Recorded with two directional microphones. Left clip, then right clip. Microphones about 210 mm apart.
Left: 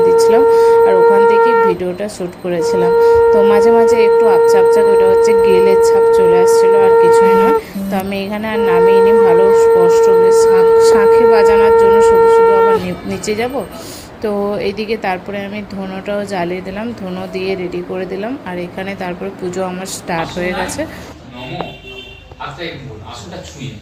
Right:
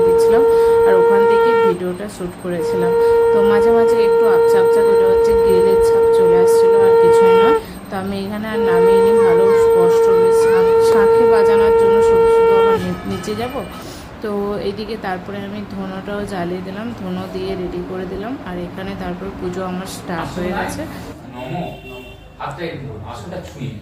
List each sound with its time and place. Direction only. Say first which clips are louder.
0.2 s a sound: left 3 dB; 15° left (ahead or behind)
2.1 s speech: left 5 dB; 15° left (ahead or behind)
11.7 s a woman's voice: left 4 dB; 30° left (ahead or behind)
13.3 s speech: left 7 dB; 15° left (ahead or behind)
18.9 s a woman's voice: left 4 dB; 15° left (ahead or behind)